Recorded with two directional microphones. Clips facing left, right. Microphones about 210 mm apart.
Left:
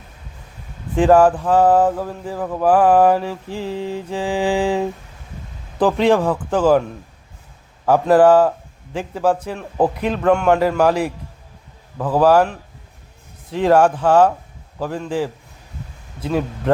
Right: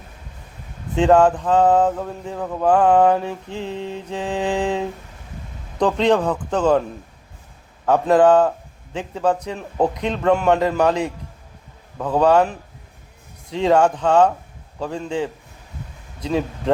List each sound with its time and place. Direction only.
0.9 s a man's voice: 5° left (ahead or behind)
3.2 s mantra: 20° right (ahead or behind)
3.9 s a man's voice: 10° left (ahead or behind)
7.9 s a man's voice: 5° left (ahead or behind)